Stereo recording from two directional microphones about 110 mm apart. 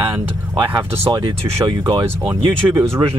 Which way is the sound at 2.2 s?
15° right (ahead or behind).